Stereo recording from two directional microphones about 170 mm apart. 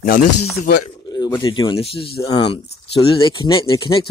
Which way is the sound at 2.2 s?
25° left (ahead or behind).